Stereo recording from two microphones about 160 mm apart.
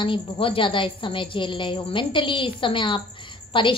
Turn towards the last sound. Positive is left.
turn(degrees=30)  # may be behind; listen again after turning